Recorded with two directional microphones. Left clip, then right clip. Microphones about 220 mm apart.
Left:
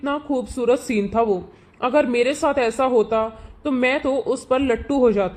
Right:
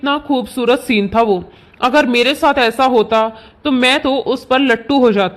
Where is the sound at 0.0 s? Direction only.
20° right (ahead or behind).